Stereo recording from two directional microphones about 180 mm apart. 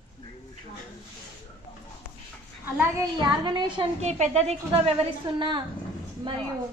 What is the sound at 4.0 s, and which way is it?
Speech, 40° right (ahead or behind).